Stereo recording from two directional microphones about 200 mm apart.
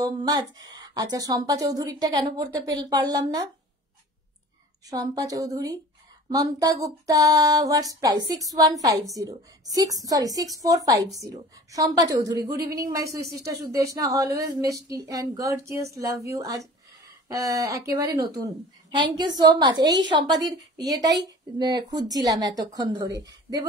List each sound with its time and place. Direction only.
0.0 s speech: 20° right (ahead or behind)
4.8 s a woman's voice: 20° right (ahead or behind)